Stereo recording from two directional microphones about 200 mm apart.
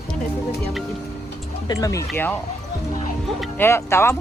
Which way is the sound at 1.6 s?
15° left (ahead or behind).